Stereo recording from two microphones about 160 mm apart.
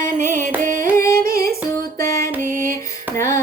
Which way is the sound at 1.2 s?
65° right (ahead or behind).